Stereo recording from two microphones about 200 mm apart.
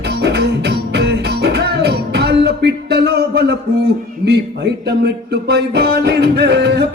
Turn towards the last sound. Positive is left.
turn(degrees=-55)  # may be behind; listen again after turning